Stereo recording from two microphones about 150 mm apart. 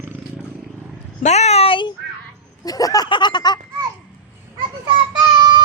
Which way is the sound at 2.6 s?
25° left (ahead or behind).